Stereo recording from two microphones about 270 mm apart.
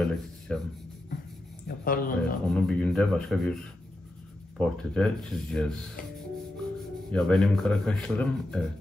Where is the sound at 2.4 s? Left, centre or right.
Centre.